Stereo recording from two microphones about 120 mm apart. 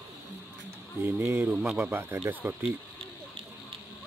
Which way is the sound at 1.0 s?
15° right (ahead or behind).